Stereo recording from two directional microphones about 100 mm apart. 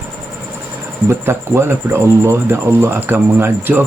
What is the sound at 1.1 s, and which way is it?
Speech, 25° right (ahead or behind).